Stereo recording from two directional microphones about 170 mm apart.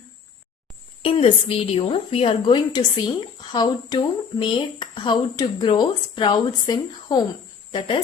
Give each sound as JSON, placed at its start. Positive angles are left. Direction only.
{"t": 1.0, "sound": "a woman's voice", "side_deg": 30}